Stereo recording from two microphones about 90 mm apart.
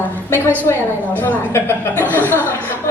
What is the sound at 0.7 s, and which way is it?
A woman's voice, 20° left (ahead or behind).